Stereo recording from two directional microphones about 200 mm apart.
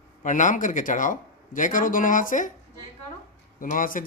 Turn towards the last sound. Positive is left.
turn(degrees=40)  # may be behind; listen again after turning